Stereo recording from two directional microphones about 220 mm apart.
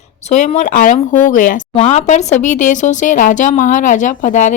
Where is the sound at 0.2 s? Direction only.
30° left (ahead or behind).